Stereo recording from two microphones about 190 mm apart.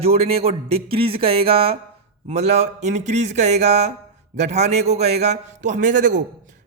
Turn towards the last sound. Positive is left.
turn(degrees=-40)  # may be behind; listen again after turning